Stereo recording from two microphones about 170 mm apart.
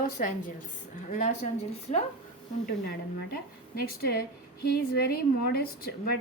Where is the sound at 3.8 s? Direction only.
65° left (ahead or behind).